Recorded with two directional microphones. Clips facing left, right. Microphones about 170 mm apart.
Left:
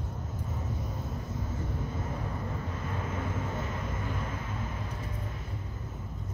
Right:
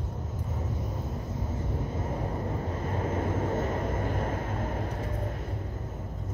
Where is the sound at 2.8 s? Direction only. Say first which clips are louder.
Right 6 dB; 40° right (ahead or behind).